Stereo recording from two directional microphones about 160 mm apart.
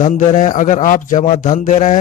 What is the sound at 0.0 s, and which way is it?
Speech, 50° left (ahead or behind).